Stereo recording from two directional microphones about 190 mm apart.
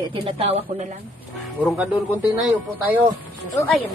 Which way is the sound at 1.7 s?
10° right (ahead or behind).